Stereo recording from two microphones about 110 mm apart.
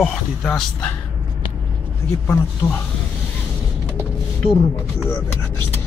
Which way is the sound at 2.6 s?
20° left (ahead or behind).